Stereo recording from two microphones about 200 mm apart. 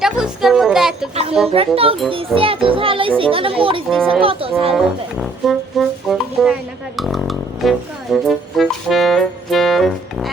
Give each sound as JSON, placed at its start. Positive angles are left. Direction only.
{"t": 0.0, "sound": "music", "side_deg": 0}
{"t": 1.5, "sound": "a child's voice", "side_deg": -30}
{"t": 3.8, "sound": "speech", "side_deg": 0}
{"t": 4.2, "sound": "a child's voice", "side_deg": -25}
{"t": 5.2, "sound": "music", "side_deg": 0}